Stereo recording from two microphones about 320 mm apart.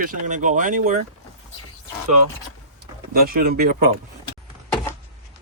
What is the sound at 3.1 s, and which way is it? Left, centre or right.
Speech, right.